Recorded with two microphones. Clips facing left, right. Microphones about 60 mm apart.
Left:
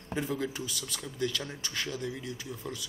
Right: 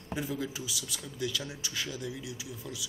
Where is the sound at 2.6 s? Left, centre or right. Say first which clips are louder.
Left 4 dB; centre.